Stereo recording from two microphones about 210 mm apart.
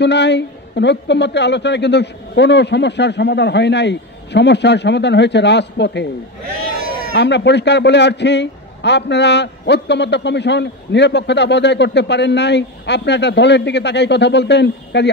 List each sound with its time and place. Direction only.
0.0 s a man's voice: 55° left (ahead or behind)
7.2 s a man's voice: 55° left (ahead or behind)